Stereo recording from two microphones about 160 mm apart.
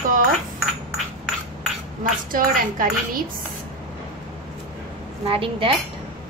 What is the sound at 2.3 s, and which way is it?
Speech, 60° right (ahead or behind).